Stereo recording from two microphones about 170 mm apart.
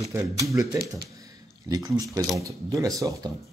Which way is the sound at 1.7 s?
20° right (ahead or behind).